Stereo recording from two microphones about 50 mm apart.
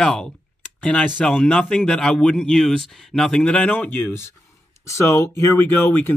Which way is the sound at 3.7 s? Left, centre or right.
Left.